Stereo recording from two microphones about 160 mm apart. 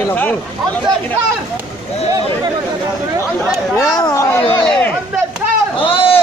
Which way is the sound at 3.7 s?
25° left (ahead or behind).